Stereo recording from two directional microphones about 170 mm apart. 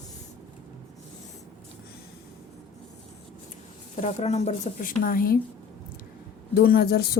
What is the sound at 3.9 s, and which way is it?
Speech, 45° left (ahead or behind).